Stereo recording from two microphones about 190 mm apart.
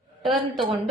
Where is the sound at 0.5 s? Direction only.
Centre (ahead or behind).